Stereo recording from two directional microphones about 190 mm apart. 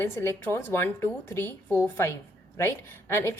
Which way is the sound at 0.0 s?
10° left (ahead or behind).